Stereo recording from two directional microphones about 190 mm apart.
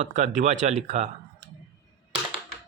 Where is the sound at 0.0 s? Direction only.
40° right (ahead or behind).